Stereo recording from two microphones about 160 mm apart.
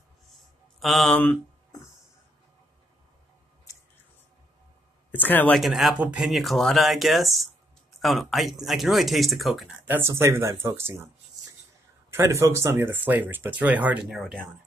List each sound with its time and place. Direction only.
0.7 s speech: centre (ahead or behind)
5.1 s speech: 10° left (ahead or behind)
5.6 s speech: centre (ahead or behind)
9.9 s speech: 15° right (ahead or behind)
12.1 s speech: 20° right (ahead or behind); by 14.4 s centre (ahead or behind)